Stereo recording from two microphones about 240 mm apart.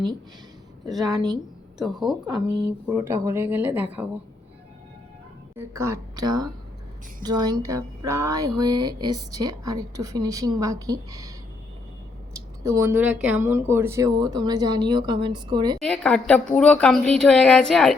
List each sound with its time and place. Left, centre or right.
1.1 s speech: centre
1.8 s speech: centre
5.5 s speech: centre
12.3 s a sound: centre
13.2 s speech: centre
15.8 s speech: centre